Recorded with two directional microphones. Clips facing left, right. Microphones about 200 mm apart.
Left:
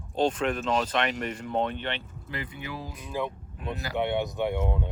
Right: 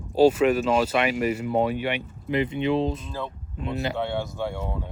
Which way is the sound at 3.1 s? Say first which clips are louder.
Left 2 dB; 15° left (ahead or behind).